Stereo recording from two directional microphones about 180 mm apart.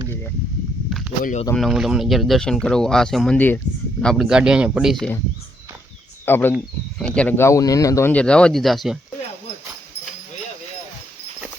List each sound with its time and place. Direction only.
1.2 s speech: 45° left (ahead or behind)
1.5 s speech: centre (ahead or behind)
6.2 s speech: 10° left (ahead or behind)